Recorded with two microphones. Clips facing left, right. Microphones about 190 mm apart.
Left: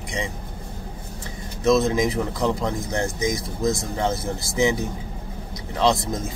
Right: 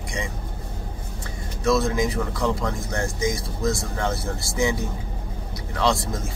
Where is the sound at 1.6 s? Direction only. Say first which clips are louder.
Left 3 dB; 20° left (ahead or behind).